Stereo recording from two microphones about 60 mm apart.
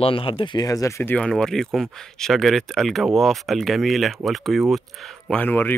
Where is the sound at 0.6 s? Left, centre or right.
Left.